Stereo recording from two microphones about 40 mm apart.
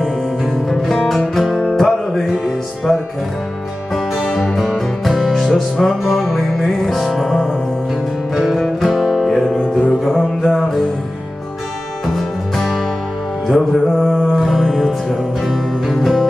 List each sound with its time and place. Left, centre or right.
1.3 s music: centre
4.7 s music: centre
8.5 s music: centre
9.6 s music: left
10.0 s music: centre
12.1 s music: centre